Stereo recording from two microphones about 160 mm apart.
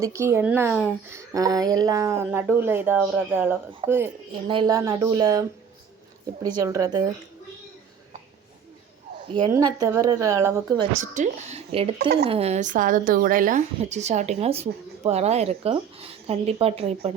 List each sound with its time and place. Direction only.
0.0 s speech: 20° right (ahead or behind)
1.1 s speech: 20° right (ahead or behind)
4.4 s speech: 30° right (ahead or behind)
9.5 s speech: 20° right (ahead or behind)
11.0 s speech: 50° right (ahead or behind)
11.9 s speech: 90° right
12.2 s speech: 40° right (ahead or behind)